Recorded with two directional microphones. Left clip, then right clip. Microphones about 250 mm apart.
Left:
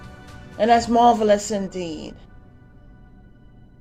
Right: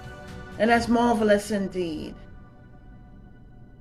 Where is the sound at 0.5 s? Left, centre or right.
Left.